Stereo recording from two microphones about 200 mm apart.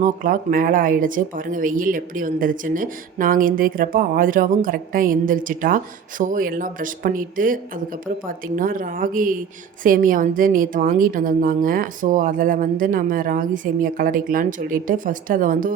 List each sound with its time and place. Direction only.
0.0 s speech: 45° right (ahead or behind)